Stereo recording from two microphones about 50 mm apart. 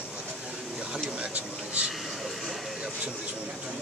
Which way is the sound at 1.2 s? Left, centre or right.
Right.